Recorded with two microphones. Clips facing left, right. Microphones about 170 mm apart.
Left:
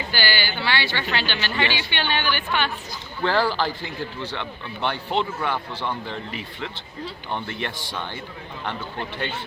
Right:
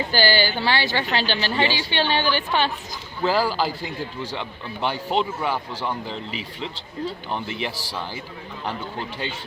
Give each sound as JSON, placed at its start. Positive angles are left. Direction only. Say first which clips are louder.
{"t": 0.1, "sound": "speech", "louder": "right 6 dB", "side_deg": -35}
{"t": 3.2, "sound": "speech", "louder": "right 1 dB", "side_deg": -10}
{"t": 7.3, "sound": "speech", "louder": "right 1 dB", "side_deg": -5}